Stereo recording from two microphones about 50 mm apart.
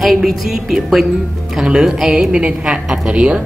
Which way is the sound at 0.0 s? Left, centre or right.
Centre.